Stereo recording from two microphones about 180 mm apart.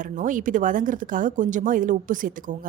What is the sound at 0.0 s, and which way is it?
A woman's voice, 45° right (ahead or behind).